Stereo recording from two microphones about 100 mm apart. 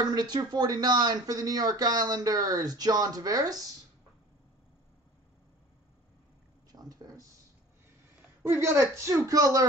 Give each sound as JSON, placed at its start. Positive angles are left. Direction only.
{"t": 0.0, "sound": "speech", "side_deg": -45}
{"t": 6.7, "sound": "a sound", "side_deg": -40}
{"t": 8.4, "sound": "speech", "side_deg": -25}